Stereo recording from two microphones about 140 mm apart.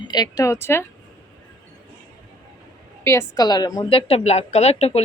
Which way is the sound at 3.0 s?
20° left (ahead or behind).